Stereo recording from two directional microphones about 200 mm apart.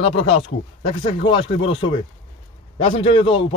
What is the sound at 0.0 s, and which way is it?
Speech, 25° left (ahead or behind).